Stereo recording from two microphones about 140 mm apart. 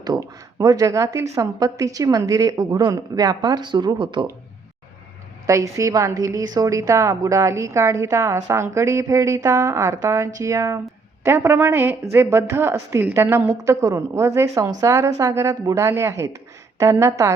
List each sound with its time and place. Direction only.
0.0 s speech: 25° right (ahead or behind)
5.5 s speech: 20° right (ahead or behind)